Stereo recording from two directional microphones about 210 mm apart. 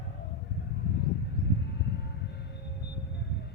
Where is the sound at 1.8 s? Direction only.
55° left (ahead or behind).